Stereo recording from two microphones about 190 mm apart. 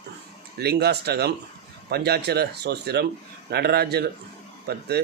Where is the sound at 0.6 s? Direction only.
60° right (ahead or behind).